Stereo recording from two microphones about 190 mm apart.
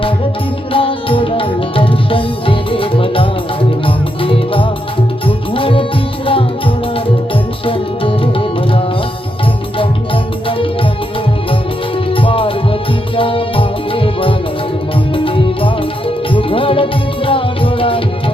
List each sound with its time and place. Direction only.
0.7 s music: 30° left (ahead or behind)
7.6 s music: 30° left (ahead or behind)
12.1 s music: 30° left (ahead or behind)